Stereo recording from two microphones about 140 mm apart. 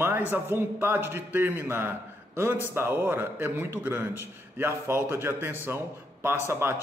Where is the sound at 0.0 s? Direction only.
15° right (ahead or behind).